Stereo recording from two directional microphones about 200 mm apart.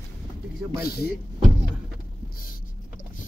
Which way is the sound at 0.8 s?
50° left (ahead or behind).